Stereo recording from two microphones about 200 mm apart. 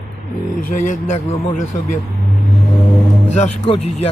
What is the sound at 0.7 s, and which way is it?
A man's voice, 40° left (ahead or behind).